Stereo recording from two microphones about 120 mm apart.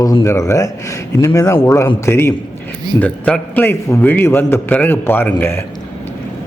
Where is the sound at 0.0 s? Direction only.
30° left (ahead or behind).